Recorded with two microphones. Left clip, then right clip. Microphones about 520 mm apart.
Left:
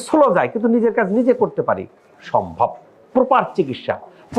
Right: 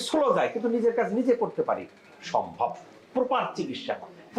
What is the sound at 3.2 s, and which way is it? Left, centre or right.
Speech, left.